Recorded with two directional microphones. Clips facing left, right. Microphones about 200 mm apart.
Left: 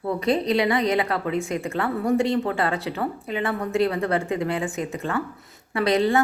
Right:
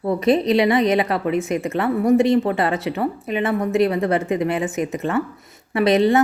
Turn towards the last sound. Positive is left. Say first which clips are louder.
# right 5 dB
turn(degrees=-20)  # may be behind; listen again after turning